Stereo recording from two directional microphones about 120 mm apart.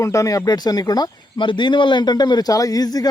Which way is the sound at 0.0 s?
25° left (ahead or behind).